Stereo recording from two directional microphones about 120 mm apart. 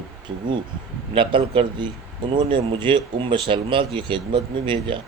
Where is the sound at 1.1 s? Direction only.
45° right (ahead or behind).